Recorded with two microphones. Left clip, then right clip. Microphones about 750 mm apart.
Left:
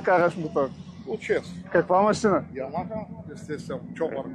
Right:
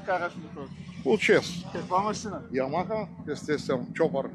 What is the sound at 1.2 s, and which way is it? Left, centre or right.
Speech, right.